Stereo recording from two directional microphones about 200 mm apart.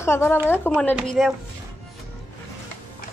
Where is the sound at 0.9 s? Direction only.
Centre (ahead or behind).